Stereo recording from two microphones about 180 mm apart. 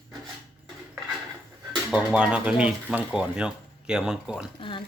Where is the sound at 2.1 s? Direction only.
5° right (ahead or behind).